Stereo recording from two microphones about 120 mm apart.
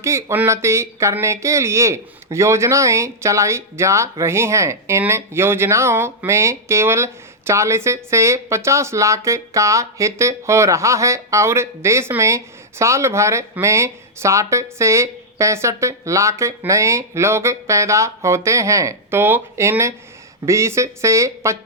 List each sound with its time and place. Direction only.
0.0 s speech: 25° right (ahead or behind)